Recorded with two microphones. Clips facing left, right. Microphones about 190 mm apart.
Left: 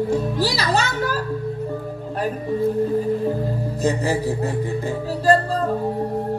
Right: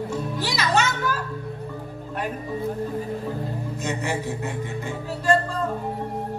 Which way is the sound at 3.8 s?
35° left (ahead or behind).